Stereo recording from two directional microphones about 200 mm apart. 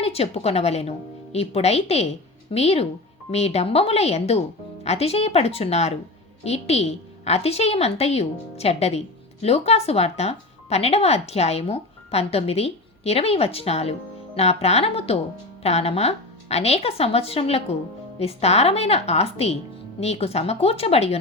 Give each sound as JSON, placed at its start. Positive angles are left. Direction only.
{"t": 0.0, "sound": "a woman's voice", "side_deg": 30}